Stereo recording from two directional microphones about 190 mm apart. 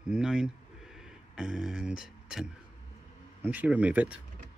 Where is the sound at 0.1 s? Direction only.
5° right (ahead or behind).